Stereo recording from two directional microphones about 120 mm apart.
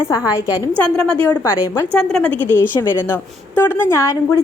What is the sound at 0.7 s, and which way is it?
A woman's voice, 10° left (ahead or behind).